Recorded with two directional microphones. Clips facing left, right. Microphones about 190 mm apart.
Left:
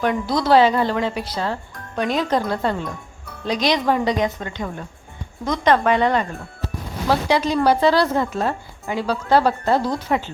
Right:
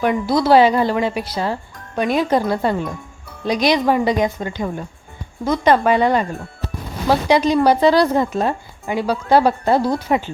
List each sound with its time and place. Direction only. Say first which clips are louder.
0.0 s speech: right 3 dB; 10° right (ahead or behind)